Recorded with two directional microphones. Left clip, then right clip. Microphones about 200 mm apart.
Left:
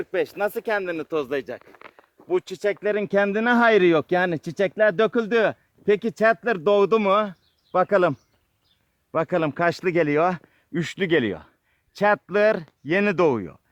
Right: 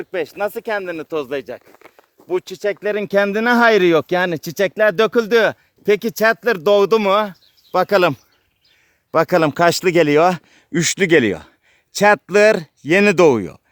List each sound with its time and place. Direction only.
0.0 s speech: 45° right (ahead or behind)
9.1 s speech: 55° right (ahead or behind)